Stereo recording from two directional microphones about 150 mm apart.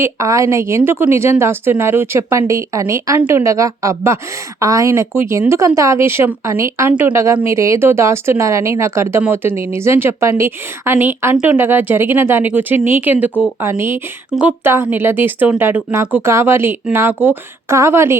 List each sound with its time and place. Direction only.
0.0 s a woman's voice: 20° right (ahead or behind)